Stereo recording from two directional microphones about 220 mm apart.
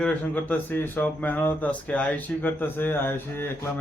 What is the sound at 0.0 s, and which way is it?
Speech, 5° left (ahead or behind).